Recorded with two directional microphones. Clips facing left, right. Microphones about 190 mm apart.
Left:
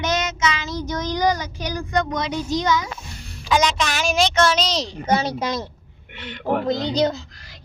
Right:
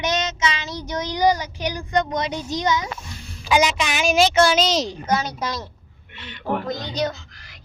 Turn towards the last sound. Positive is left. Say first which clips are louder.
# left 5 dB
turn(degrees=30)  # may be behind; listen again after turning